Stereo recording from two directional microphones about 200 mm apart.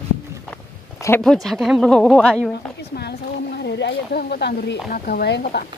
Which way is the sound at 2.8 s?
55° left (ahead or behind).